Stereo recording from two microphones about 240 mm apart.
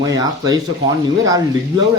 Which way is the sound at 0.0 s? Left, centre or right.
Centre.